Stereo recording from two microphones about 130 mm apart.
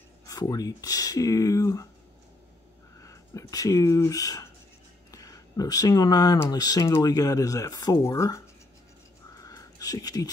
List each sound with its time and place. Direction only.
0.3 s speech: 30° left (ahead or behind)
3.0 s speech: 25° left (ahead or behind)
9.4 s a sound: 30° left (ahead or behind)